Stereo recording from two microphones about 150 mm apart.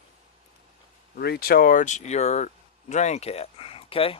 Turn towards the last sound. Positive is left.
turn(degrees=40)  # may be behind; listen again after turning